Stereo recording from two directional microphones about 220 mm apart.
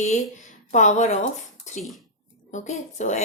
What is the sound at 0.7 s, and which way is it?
Speech, 35° left (ahead or behind).